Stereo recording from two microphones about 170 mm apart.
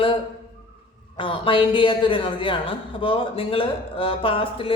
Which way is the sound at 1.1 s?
30° left (ahead or behind).